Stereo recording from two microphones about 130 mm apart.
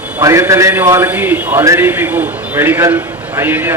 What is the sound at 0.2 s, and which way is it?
A man's voice, 25° right (ahead or behind).